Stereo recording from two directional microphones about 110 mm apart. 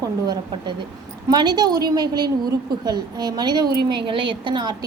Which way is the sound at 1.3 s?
40° right (ahead or behind).